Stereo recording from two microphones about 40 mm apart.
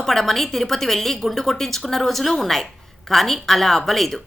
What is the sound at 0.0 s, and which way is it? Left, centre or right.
Speech, centre.